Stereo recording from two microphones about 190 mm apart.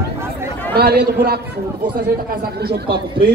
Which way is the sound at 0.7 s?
55° right (ahead or behind).